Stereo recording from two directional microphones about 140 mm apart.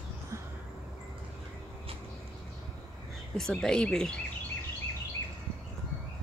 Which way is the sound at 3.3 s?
5° left (ahead or behind).